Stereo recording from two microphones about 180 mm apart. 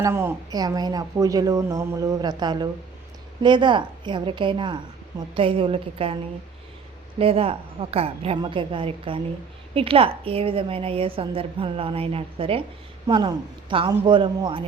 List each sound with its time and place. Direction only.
0.0 s a woman's voice: 15° right (ahead or behind); by 6.1 s 30° right (ahead or behind)
7.2 s a woman's voice: 30° right (ahead or behind)